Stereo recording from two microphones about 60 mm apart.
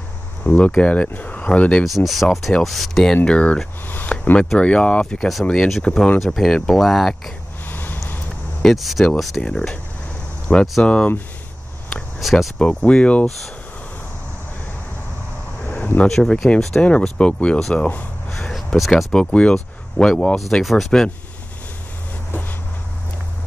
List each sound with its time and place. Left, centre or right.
0.4 s speech: centre
1.9 s speech: centre
3.3 s speech: centre
3.8 s a sound: left
4.6 s speech: centre
7.6 s a sound: left
8.6 s speech: centre
9.4 s speech: centre
10.8 s speech: centre
12.2 s speech: centre
12.5 s speech: centre
16.0 s speech: centre
17.6 s speech: centre
19.1 s speech: centre